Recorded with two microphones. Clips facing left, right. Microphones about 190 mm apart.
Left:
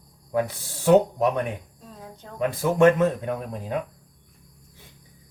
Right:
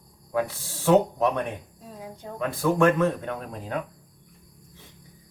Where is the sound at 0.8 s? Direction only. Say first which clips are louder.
Left 2 dB; 10° left (ahead or behind).